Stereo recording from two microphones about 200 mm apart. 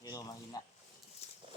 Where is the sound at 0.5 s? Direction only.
20° left (ahead or behind).